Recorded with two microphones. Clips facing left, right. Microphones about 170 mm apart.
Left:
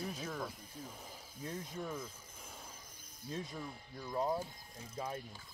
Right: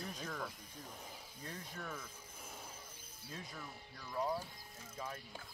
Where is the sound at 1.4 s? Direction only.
15° left (ahead or behind).